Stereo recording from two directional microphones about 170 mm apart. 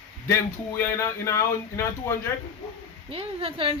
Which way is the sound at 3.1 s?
35° right (ahead or behind).